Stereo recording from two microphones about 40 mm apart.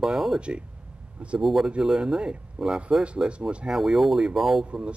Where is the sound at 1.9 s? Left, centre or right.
Centre.